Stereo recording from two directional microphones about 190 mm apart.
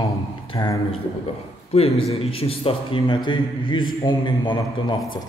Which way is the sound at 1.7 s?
30° left (ahead or behind).